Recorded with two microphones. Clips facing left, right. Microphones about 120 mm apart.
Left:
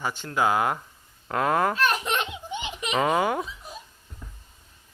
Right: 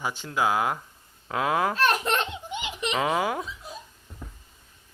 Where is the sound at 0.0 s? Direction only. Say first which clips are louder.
Left 1 dB; 10° right (ahead or behind).